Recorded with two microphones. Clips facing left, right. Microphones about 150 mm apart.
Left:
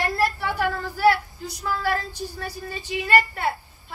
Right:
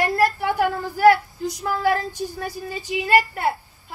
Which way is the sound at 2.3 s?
15° right (ahead or behind).